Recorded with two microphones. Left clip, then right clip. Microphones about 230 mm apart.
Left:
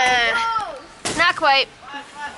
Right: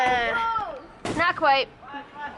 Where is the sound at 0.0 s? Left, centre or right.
Centre.